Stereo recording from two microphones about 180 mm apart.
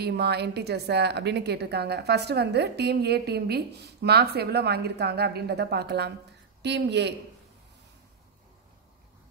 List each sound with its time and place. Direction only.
0.0 s a woman's voice: 65° right (ahead or behind)